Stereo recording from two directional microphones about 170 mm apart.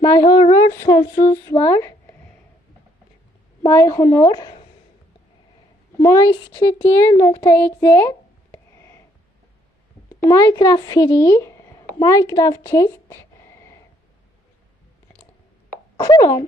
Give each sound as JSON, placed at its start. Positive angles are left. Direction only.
{"t": 0.3, "sound": "speech", "side_deg": 35}
{"t": 0.5, "sound": "speech", "side_deg": 20}
{"t": 3.7, "sound": "speech", "side_deg": 15}
{"t": 6.0, "sound": "speech", "side_deg": 20}
{"t": 6.8, "sound": "speech", "side_deg": 15}
{"t": 8.5, "sound": "a sound", "side_deg": 15}
{"t": 10.2, "sound": "speech", "side_deg": 20}
{"t": 16.0, "sound": "speech", "side_deg": 25}